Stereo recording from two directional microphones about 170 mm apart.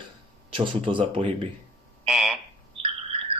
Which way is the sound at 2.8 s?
35° right (ahead or behind).